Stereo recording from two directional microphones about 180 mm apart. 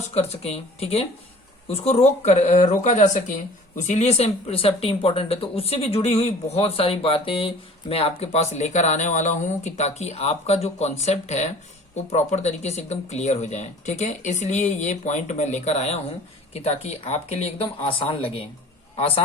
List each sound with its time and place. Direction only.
0.1 s speech: 35° left (ahead or behind)